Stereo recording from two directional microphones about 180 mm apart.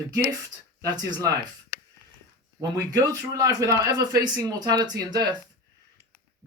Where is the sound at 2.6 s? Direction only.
20° right (ahead or behind).